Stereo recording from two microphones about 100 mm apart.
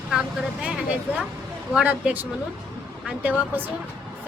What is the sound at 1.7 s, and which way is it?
Speech, 10° right (ahead or behind).